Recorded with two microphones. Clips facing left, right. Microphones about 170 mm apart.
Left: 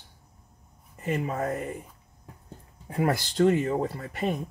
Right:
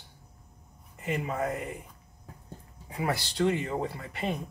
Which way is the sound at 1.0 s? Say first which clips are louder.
Left 2 dB; 40° left (ahead or behind).